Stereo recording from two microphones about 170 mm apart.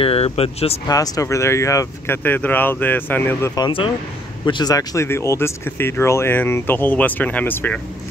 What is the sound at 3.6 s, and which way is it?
Speech, 30° left (ahead or behind).